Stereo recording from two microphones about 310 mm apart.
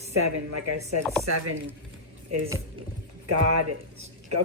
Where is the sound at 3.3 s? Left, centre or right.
Right.